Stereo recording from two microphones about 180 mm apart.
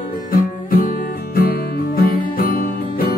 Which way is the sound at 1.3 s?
55° left (ahead or behind).